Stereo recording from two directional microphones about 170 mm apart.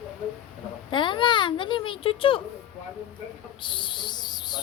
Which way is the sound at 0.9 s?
30° left (ahead or behind).